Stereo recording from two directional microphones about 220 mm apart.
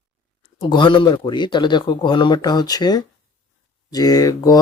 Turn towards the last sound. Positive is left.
turn(degrees=15)  # may be behind; listen again after turning